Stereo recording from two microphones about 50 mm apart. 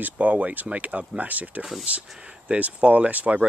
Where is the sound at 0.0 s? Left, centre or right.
Right.